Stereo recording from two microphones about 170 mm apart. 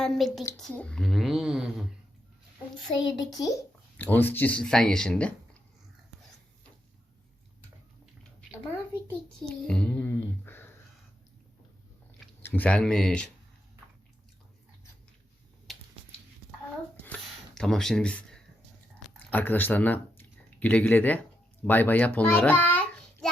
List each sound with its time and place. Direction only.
0.0 s speech: centre (ahead or behind)
3.3 s a child's voice: 20° left (ahead or behind)
3.9 s speech: 10° left (ahead or behind)
9.0 s a sound: 5° left (ahead or behind)
12.4 s speech: 10° left (ahead or behind)
17.0 s a sound: 5° left (ahead or behind)
19.3 s a child's voice: 10° left (ahead or behind)